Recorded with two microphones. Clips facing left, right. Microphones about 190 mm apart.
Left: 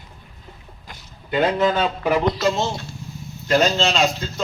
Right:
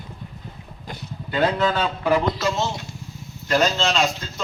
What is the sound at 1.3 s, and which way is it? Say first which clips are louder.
Speech: left 2 dB; 15° left (ahead or behind).